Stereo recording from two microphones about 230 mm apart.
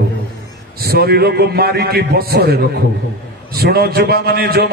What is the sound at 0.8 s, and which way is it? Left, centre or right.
A man's voice, right.